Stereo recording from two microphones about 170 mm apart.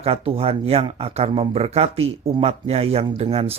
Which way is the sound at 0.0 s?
35° right (ahead or behind).